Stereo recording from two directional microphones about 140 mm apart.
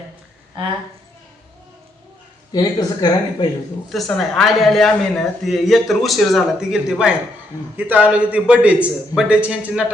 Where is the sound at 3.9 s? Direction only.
Centre (ahead or behind).